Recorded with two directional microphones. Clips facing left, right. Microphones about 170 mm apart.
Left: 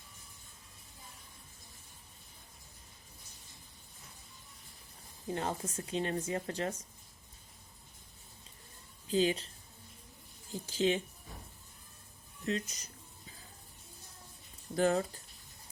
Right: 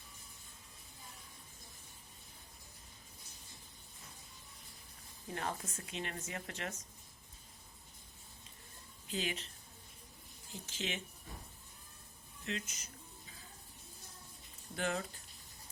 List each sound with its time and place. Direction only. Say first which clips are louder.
5.3 s speech: left 5 dB; 25° left (ahead or behind)
9.0 s speech: left 10 dB; 35° left (ahead or behind)
10.5 s speech: left 12 dB; 35° left (ahead or behind)
12.5 s speech: left 7 dB; 35° left (ahead or behind)
14.8 s speech: left 9 dB; 40° left (ahead or behind)